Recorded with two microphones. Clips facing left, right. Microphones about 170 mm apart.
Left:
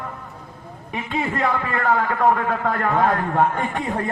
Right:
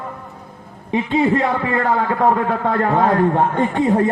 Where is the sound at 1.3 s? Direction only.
25° right (ahead or behind).